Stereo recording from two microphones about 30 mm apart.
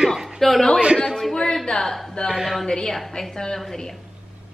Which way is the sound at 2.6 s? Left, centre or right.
Left.